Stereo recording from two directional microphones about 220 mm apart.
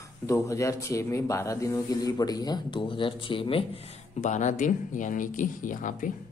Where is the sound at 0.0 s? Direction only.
15° left (ahead or behind); by 6.1 s 35° left (ahead or behind).